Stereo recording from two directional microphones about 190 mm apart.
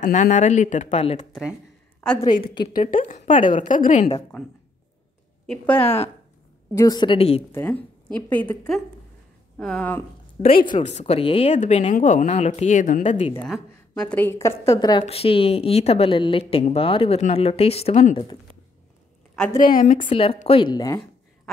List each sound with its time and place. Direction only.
0.0 s a woman's voice: 40° left (ahead or behind)
2.7 s a woman's voice: 45° left (ahead or behind)
5.5 s a woman's voice: 10° left (ahead or behind); by 7.4 s 30° left (ahead or behind)
7.5 s a woman's voice: 10° left (ahead or behind)
9.6 s speech: 5° left (ahead or behind)
10.5 s a woman's voice: 40° left (ahead or behind)
13.5 s a woman's voice: 5° left (ahead or behind); by 18.2 s 35° left (ahead or behind)
19.5 s a woman's voice: 45° left (ahead or behind); by 21.0 s 20° left (ahead or behind)